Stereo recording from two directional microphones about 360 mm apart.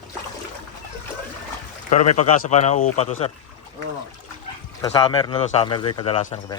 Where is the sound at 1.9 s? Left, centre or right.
Centre.